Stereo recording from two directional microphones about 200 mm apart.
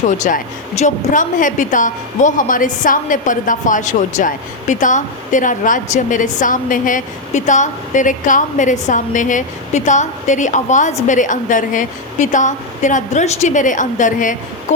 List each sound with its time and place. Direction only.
0.2 s a woman's voice: 40° left (ahead or behind)